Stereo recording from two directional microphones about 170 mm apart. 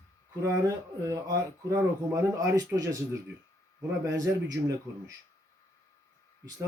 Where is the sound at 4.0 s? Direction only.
20° right (ahead or behind).